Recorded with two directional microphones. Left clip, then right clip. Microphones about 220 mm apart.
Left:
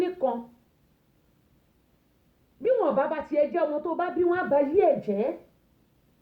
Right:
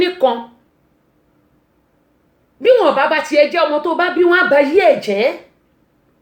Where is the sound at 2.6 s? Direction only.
20° right (ahead or behind).